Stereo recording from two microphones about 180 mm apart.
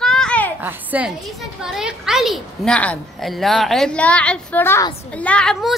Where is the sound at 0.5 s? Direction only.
10° right (ahead or behind).